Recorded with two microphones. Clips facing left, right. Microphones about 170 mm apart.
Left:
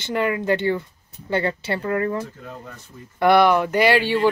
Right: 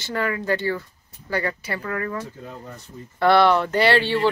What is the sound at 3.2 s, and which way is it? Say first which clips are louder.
Speech: left 1 dB; 15° left (ahead or behind).